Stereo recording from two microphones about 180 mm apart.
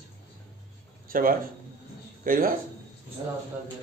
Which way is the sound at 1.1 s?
50° right (ahead or behind).